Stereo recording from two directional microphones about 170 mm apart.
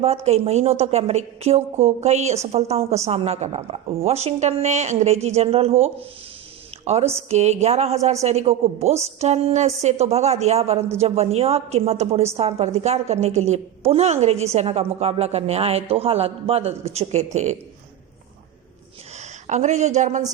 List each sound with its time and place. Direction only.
0.0 s a woman's voice: 40° right (ahead or behind)
19.5 s speech: 45° right (ahead or behind)